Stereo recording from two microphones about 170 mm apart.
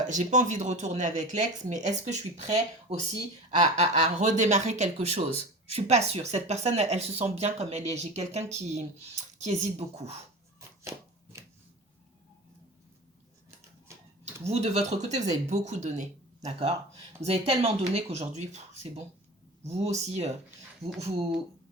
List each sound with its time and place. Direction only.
0.1 s speech: 45° right (ahead or behind)
10.8 s chopping: 20° right (ahead or behind)
14.4 s speech: 40° right (ahead or behind)